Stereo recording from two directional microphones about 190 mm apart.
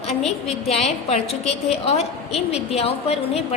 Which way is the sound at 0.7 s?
35° left (ahead or behind).